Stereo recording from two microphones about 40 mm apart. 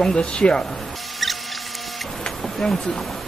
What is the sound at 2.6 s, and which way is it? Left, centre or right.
Speech, centre.